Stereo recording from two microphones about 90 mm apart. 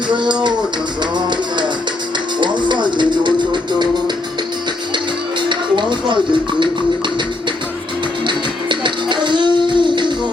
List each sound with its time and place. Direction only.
0.1 s a sound: 60° right (ahead or behind)
1.1 s music: 60° right (ahead or behind)
5.4 s music: 60° right (ahead or behind)
8.3 s music: 60° right (ahead or behind)